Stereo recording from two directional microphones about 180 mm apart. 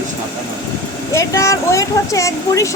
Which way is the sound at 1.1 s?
15° left (ahead or behind).